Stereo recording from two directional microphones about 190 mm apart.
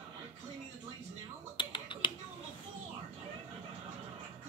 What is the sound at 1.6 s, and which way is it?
Finger snapping, 25° left (ahead or behind).